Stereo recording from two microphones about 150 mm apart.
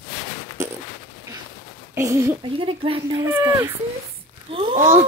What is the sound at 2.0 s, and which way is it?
Speech, 20° right (ahead or behind).